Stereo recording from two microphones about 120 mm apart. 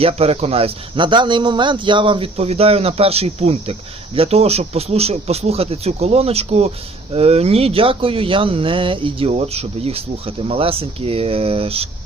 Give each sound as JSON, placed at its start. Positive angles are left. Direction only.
{"t": 0.0, "sound": "speech", "side_deg": -55}
{"t": 9.4, "sound": "speech", "side_deg": -60}